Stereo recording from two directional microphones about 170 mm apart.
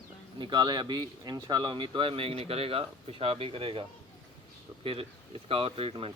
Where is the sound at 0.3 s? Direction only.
25° right (ahead or behind).